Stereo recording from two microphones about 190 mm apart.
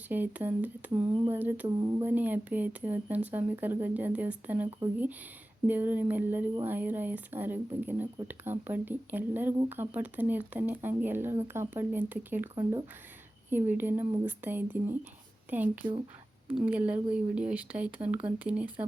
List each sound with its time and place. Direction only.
0.1 s speech: 10° right (ahead or behind)
1.1 s speech: 20° right (ahead or behind)
1.4 s speech: 10° right (ahead or behind)
1.6 s speech: 20° right (ahead or behind)
2.0 s speech: 10° right (ahead or behind)
13.5 s speech: 10° right (ahead or behind)